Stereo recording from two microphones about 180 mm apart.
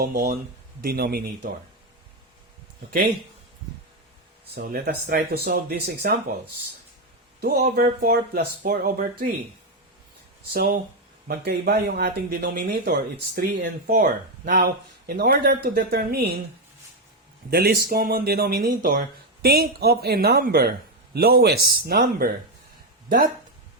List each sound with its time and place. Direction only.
0.8 s speech: 55° right (ahead or behind)
4.5 s speech: 60° right (ahead or behind)
7.8 s speech: 55° right (ahead or behind)
10.5 s speech: 55° right (ahead or behind)
17.5 s speech: 60° right (ahead or behind)